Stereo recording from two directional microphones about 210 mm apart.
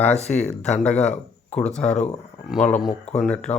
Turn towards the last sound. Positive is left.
turn(degrees=5)  # may be behind; listen again after turning